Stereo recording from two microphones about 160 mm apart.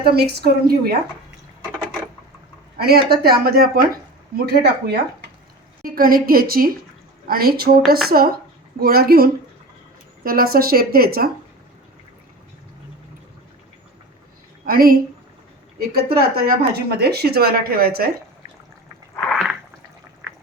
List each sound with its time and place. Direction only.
0.0 s speech: 80° right
2.7 s speech: 75° right (ahead or behind)
4.4 s a woman's voice: 90° right
5.8 s a woman's voice: 65° right (ahead or behind)
14.6 s a woman's voice: 65° right (ahead or behind)
16.7 s speech: 90° right; by 18.1 s 70° right (ahead or behind)
19.2 s a sound: centre (ahead or behind)